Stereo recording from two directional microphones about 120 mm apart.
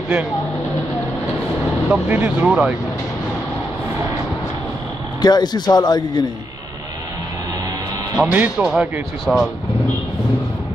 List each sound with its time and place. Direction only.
1.9 s speech: 15° right (ahead or behind)
5.2 s a man's voice: 35° left (ahead or behind)
8.2 s speech: 15° right (ahead or behind)